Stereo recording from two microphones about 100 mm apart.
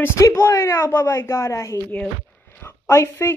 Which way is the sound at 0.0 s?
30° left (ahead or behind).